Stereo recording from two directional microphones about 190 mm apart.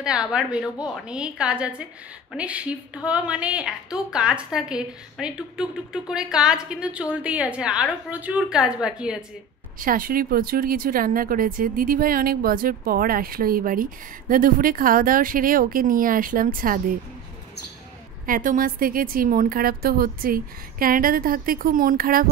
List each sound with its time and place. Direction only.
0.0 s a woman's voice: 5° right (ahead or behind)
9.8 s speech: 45° right (ahead or behind)
18.2 s speech: 45° right (ahead or behind)